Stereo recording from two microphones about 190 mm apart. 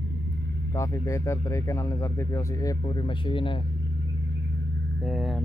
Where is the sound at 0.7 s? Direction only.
15° left (ahead or behind).